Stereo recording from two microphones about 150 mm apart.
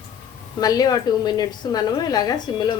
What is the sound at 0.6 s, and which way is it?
A woman's voice, 25° left (ahead or behind).